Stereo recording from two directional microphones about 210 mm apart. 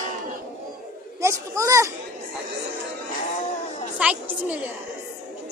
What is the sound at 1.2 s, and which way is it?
Speech, 15° right (ahead or behind).